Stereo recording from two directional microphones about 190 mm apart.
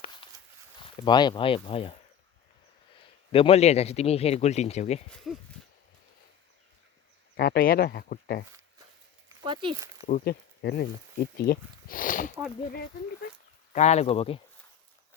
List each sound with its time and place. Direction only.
1.0 s speech: 25° left (ahead or behind)
3.3 s speech: 30° left (ahead or behind)
5.1 s speech: centre (ahead or behind)
7.3 s speech: 55° left (ahead or behind)
9.4 s speech: 25° right (ahead or behind)
10.0 s speech: 35° left (ahead or behind)
10.2 s speech: 55° left (ahead or behind)
13.7 s speech: 35° left (ahead or behind)